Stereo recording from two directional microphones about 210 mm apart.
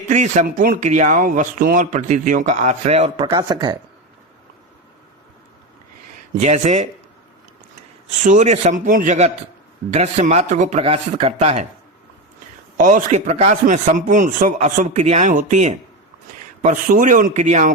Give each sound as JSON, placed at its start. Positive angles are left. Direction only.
{"t": 0.1, "sound": "speech", "side_deg": -35}
{"t": 6.3, "sound": "speech", "side_deg": -35}
{"t": 8.2, "sound": "speech", "side_deg": -35}
{"t": 12.7, "sound": "speech", "side_deg": -40}